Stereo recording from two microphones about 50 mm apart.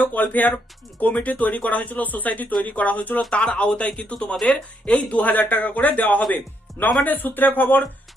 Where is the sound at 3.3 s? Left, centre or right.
Left.